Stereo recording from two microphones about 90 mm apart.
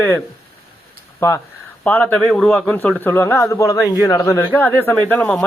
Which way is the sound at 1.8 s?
15° left (ahead or behind).